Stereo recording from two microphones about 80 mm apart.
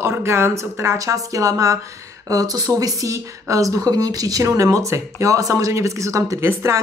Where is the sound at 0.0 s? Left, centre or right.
Right.